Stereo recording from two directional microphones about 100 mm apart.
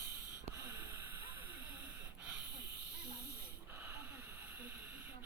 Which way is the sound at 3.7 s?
25° right (ahead or behind).